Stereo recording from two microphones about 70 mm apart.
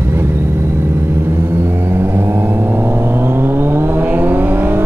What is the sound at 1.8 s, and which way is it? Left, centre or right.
Vehicle, right.